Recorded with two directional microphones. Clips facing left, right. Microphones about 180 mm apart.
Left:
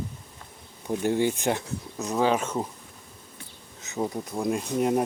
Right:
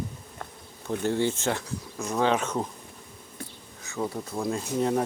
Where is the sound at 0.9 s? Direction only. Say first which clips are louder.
Left 2 dB; 15° left (ahead or behind).